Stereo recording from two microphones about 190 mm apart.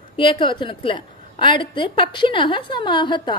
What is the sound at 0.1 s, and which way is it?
A woman's voice, 25° left (ahead or behind).